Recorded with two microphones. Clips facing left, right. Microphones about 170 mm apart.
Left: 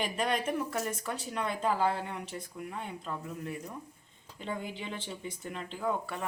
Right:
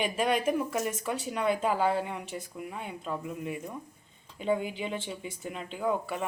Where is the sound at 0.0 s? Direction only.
5° right (ahead or behind).